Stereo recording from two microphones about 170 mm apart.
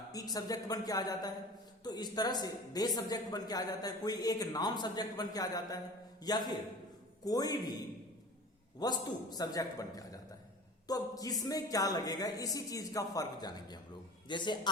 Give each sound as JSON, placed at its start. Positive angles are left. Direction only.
{"t": 0.1, "sound": "speech", "side_deg": 20}
{"t": 8.8, "sound": "speech", "side_deg": 25}